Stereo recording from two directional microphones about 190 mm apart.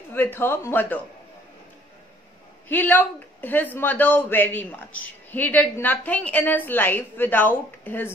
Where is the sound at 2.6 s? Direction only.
10° left (ahead or behind).